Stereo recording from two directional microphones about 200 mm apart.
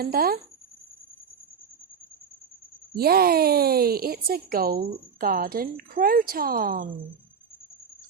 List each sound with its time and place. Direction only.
0.0 s a woman's voice: 50° right (ahead or behind)
2.9 s a woman's voice: 50° right (ahead or behind)